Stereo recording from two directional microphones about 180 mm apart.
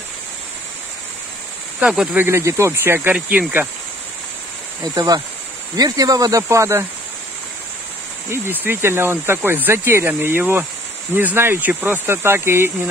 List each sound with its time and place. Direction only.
1.8 s speech: 5° right (ahead or behind)
4.8 s speech: 20° right (ahead or behind)
8.3 s speech: 10° right (ahead or behind)